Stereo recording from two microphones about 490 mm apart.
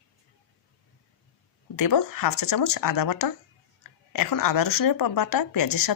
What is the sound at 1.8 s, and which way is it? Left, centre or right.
Speech, left.